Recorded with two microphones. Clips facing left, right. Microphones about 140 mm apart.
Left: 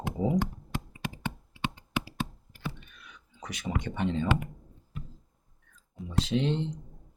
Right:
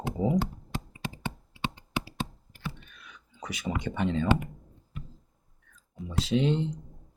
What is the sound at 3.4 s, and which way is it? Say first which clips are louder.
Speech: right 1 dB; 5° right (ahead or behind).